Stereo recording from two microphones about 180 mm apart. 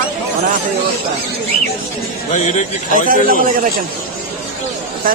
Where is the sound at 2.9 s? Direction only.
50° right (ahead or behind).